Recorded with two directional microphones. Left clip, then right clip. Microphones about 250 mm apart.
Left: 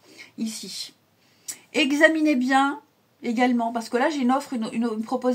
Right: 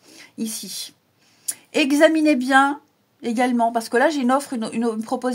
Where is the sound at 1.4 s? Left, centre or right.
Right.